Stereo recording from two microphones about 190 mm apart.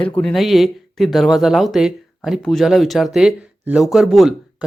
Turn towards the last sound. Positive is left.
turn(degrees=0)  # may be behind; listen again after turning